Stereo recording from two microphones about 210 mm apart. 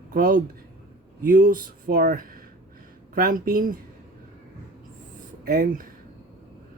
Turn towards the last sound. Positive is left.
turn(degrees=-45)  # may be behind; listen again after turning